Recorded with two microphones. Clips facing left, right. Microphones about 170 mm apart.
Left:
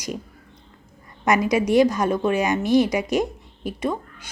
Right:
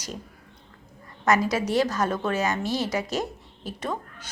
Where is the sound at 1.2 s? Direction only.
15° left (ahead or behind).